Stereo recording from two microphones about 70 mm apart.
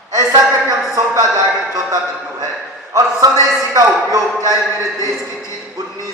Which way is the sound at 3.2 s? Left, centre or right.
Right.